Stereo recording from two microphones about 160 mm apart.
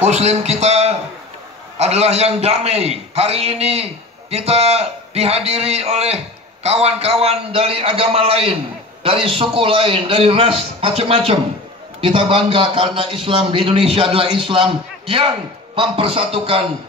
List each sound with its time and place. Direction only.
0.0 s a man's voice: 40° right (ahead or behind)